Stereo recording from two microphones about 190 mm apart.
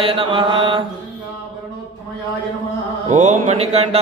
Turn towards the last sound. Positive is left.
turn(degrees=-35)  # may be behind; listen again after turning